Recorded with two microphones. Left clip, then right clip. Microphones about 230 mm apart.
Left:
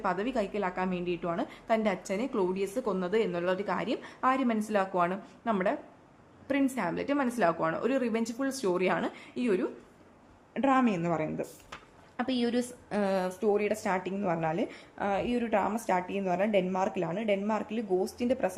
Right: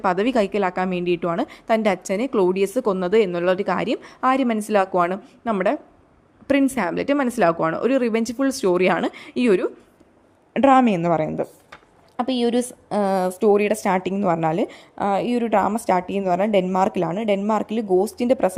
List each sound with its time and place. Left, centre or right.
0.0 s a woman's voice: right
12.1 s a woman's voice: right